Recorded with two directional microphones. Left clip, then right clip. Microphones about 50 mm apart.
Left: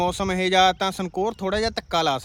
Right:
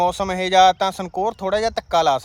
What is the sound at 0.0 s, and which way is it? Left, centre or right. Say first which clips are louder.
Speech: right 3 dB; left.